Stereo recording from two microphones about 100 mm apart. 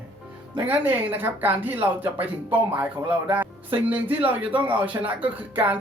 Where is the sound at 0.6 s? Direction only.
20° right (ahead or behind).